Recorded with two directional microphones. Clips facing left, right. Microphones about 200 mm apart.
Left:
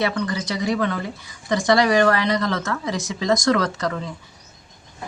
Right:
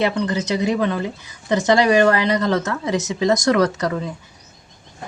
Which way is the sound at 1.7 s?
15° right (ahead or behind).